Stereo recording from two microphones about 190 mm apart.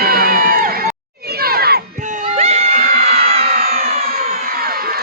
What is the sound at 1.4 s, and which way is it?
Crowd, 55° right (ahead or behind).